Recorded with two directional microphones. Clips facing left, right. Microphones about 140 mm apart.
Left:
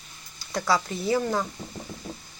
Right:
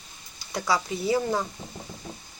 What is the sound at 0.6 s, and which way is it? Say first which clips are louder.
Speech: even; 10° right (ahead or behind).